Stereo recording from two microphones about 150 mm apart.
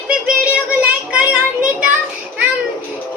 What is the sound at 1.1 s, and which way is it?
Speech, 5° right (ahead or behind).